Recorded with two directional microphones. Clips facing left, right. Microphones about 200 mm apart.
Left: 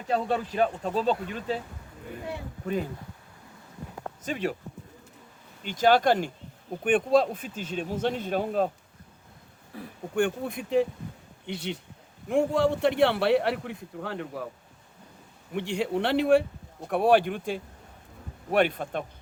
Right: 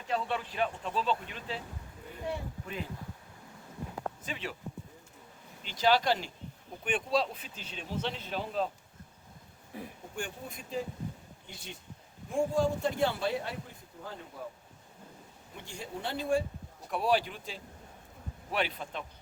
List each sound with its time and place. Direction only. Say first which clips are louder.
0.1 s speech: left 6 dB; 40° left (ahead or behind)
4.3 s speech: left 15 dB; 45° left (ahead or behind)
5.6 s speech: left 6 dB; 50° left (ahead or behind)
9.7 s speech: left 2 dB; 20° right (ahead or behind)
10.2 s a man's voice: left 14 dB; 60° left (ahead or behind); by 14.4 s 75° left (ahead or behind)
15.5 s a man's voice: left 14 dB; 75° left (ahead or behind)
16.8 s speech: left 8 dB; 55° left (ahead or behind)